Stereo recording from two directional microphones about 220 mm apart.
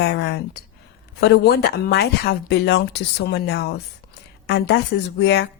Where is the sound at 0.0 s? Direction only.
50° left (ahead or behind).